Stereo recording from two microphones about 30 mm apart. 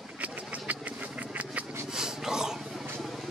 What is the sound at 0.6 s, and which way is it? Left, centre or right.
Vehicle, right.